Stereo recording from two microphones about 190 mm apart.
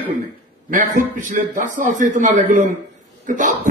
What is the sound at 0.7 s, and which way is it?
Speech, 40° right (ahead or behind).